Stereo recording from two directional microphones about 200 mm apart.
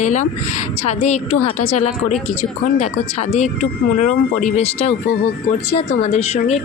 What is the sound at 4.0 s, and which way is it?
Speech, 35° left (ahead or behind).